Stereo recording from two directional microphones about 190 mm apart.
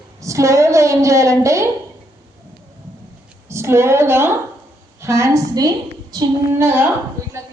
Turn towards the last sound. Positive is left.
turn(degrees=-10)  # may be behind; listen again after turning